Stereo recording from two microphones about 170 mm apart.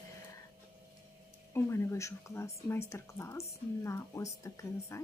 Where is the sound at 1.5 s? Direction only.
15° left (ahead or behind).